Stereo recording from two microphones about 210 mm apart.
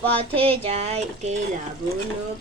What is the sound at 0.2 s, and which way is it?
Child singing, 25° right (ahead or behind).